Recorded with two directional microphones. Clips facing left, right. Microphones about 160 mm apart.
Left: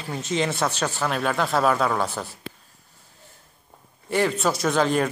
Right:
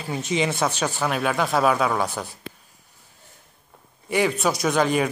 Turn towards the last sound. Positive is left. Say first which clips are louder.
# even
turn(degrees=-5)  # may be behind; listen again after turning